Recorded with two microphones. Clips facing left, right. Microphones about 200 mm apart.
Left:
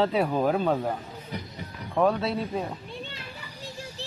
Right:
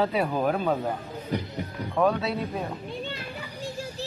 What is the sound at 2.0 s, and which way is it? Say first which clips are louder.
Speech: even; 5° left (ahead or behind).